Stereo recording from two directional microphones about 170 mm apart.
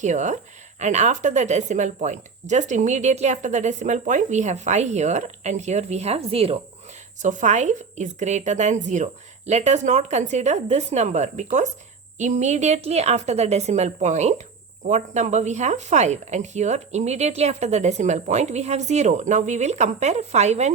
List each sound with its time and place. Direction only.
0.0 s speech: 45° right (ahead or behind)
7.2 s a woman's voice: 45° right (ahead or behind)